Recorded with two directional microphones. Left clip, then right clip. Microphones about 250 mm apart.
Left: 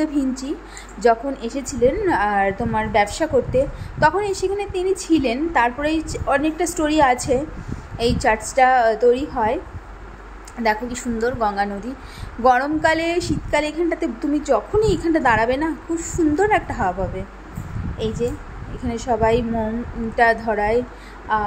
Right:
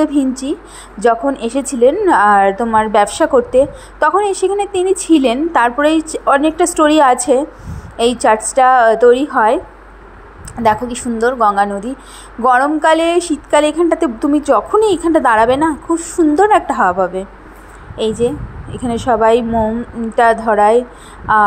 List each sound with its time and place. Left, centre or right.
0.0 s a woman's voice: centre
10.6 s a woman's voice: centre
17.9 s a woman's voice: right